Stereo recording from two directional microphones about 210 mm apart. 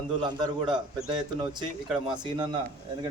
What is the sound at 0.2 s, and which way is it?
A man's voice, 20° right (ahead or behind).